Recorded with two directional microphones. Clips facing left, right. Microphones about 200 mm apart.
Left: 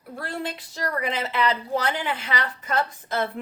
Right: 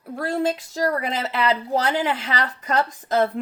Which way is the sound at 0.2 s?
45° right (ahead or behind).